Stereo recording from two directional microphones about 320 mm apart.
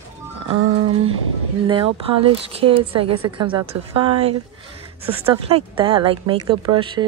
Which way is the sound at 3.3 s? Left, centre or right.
Centre.